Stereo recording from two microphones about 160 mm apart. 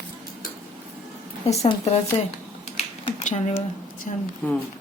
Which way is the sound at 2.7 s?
40° left (ahead or behind).